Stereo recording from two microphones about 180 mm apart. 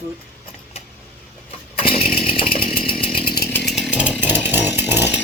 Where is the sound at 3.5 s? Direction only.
Centre (ahead or behind).